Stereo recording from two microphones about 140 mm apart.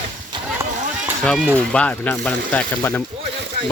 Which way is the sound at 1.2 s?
5° left (ahead or behind).